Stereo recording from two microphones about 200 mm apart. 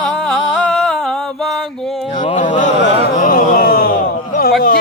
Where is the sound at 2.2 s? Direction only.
40° left (ahead or behind).